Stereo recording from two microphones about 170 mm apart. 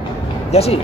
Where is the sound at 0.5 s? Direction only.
35° left (ahead or behind).